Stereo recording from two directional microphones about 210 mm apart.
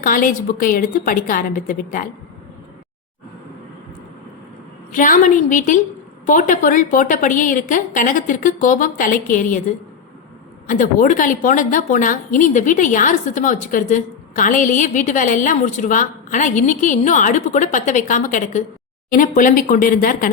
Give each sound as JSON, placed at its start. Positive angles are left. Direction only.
{"t": 0.0, "sound": "a woman's voice", "side_deg": 40}
{"t": 4.9, "sound": "a woman's voice", "side_deg": 40}
{"t": 10.7, "sound": "a woman's voice", "side_deg": 40}